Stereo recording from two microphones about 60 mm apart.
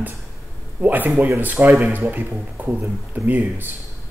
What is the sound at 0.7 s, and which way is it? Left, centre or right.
Speech, right.